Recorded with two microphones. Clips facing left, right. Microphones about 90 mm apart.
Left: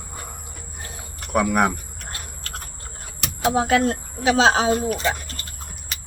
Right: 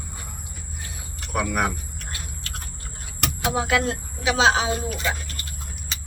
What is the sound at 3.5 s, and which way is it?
Speech, 40° left (ahead or behind).